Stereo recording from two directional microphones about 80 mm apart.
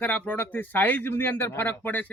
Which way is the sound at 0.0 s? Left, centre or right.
Left.